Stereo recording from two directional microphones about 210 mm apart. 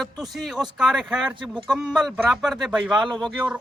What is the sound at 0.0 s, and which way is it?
Speech, centre (ahead or behind).